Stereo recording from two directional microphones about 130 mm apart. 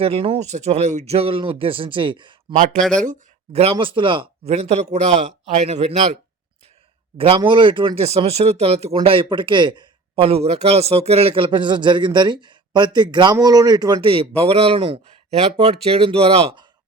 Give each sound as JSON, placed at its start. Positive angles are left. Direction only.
{"t": 0.0, "sound": "a man's voice", "side_deg": -50}
{"t": 2.7, "sound": "speech", "side_deg": 5}
{"t": 3.1, "sound": "a man's voice", "side_deg": -55}
{"t": 4.5, "sound": "a man's voice", "side_deg": -55}
{"t": 7.2, "sound": "a man's voice", "side_deg": -40}
{"t": 9.0, "sound": "a man's voice", "side_deg": -40}